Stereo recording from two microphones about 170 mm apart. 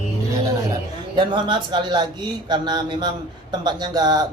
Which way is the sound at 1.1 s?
30° right (ahead or behind).